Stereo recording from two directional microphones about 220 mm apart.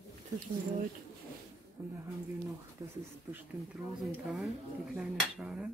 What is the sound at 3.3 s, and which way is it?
Dishes, centre (ahead or behind).